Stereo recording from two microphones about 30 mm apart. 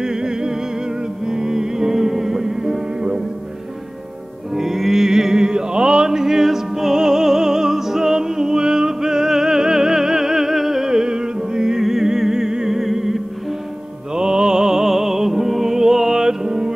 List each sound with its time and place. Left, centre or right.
0.0 s music: right
4.6 s music: centre
10.9 s music: right
14.1 s music: right